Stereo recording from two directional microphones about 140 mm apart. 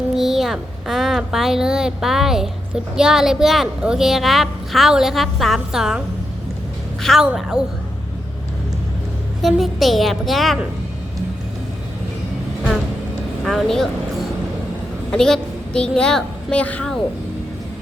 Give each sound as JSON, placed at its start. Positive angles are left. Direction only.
{"t": 0.2, "sound": "speech", "side_deg": 0}
{"t": 7.0, "sound": "speech", "side_deg": 0}
{"t": 9.4, "sound": "speech", "side_deg": 0}
{"t": 13.4, "sound": "a woman's voice", "side_deg": 0}